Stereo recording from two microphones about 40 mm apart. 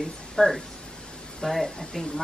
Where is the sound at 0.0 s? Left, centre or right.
Centre.